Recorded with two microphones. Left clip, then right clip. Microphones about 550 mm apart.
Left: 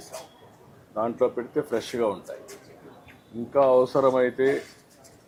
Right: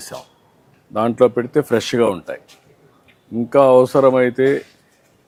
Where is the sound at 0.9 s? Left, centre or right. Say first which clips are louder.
Right 10 dB; right.